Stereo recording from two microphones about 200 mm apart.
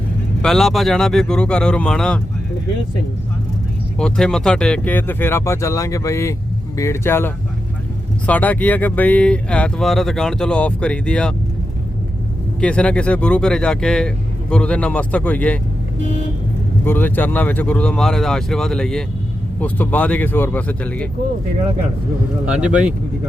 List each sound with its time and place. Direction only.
0.4 s speech: centre (ahead or behind)
3.9 s speech: 5° left (ahead or behind)
12.5 s speech: 5° left (ahead or behind)
16.8 s speech: 10° left (ahead or behind)
22.4 s speech: 5° right (ahead or behind)